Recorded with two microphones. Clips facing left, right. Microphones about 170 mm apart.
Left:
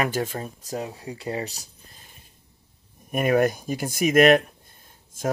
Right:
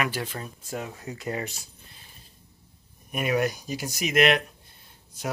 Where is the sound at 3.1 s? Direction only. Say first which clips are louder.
Left 5 dB; 50° left (ahead or behind).